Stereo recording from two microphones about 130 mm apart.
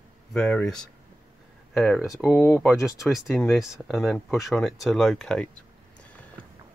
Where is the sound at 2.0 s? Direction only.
5° right (ahead or behind).